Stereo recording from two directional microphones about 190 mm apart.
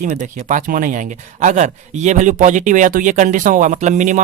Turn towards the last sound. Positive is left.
turn(degrees=-40)  # may be behind; listen again after turning